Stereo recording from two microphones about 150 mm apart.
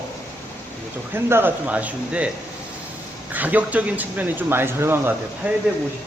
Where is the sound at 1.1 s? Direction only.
15° right (ahead or behind).